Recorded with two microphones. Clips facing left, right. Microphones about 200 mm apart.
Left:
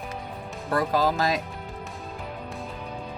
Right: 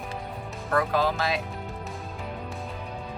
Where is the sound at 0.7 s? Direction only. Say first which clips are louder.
Left 1 dB; 35° left (ahead or behind).